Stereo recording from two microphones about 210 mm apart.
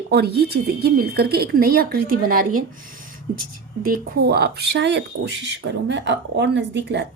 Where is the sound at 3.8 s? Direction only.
45° right (ahead or behind).